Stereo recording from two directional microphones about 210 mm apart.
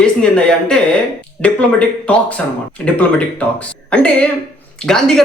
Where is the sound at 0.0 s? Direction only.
5° left (ahead or behind).